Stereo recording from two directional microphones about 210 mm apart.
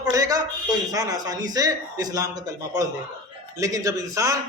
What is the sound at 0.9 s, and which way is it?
A man's voice, 15° right (ahead or behind).